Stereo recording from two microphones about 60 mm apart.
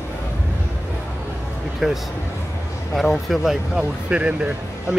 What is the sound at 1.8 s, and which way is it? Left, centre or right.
Speech, centre.